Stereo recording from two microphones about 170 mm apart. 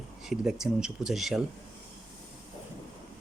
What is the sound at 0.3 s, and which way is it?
Speech, 5° right (ahead or behind).